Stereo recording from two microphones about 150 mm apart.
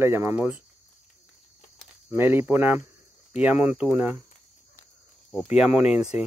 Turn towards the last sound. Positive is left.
turn(degrees=-10)  # may be behind; listen again after turning